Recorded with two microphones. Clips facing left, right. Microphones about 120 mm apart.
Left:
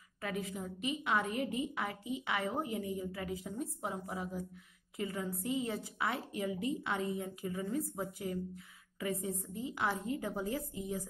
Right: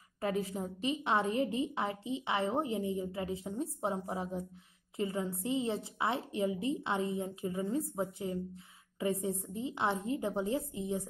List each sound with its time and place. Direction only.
0.2 s a woman's voice: 30° right (ahead or behind)